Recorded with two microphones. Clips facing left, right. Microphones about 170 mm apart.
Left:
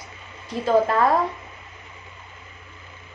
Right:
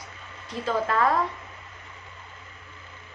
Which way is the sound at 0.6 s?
35° left (ahead or behind).